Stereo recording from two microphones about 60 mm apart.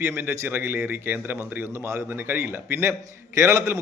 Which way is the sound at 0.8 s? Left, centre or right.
Right.